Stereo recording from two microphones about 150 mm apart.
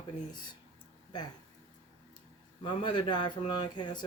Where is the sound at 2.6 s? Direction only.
30° left (ahead or behind).